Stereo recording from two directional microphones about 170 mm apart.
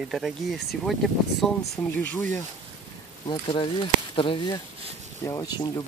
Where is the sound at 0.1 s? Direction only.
Centre (ahead or behind).